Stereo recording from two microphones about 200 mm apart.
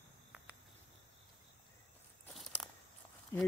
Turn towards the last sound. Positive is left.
turn(degrees=10)  # may be behind; listen again after turning